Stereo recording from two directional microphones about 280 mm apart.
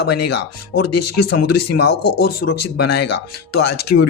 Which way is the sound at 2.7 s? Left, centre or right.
Left.